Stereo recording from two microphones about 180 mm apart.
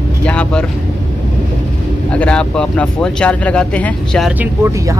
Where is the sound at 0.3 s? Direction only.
5° left (ahead or behind).